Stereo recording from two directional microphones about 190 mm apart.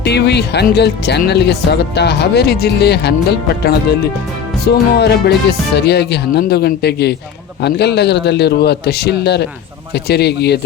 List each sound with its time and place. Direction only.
0.0 s speech: 60° left (ahead or behind)
4.6 s speech: 60° left (ahead or behind)